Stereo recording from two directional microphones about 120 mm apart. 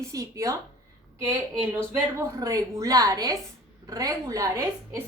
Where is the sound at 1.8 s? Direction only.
25° right (ahead or behind).